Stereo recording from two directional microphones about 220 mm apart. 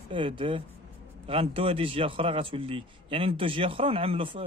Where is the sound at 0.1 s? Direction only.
25° right (ahead or behind).